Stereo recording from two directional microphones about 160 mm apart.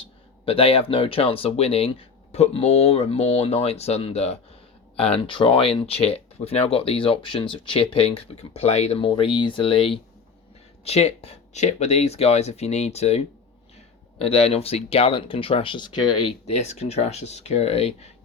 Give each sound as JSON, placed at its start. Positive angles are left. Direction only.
{"t": 0.0, "sound": "speech", "side_deg": 35}
{"t": 16.5, "sound": "speech", "side_deg": 40}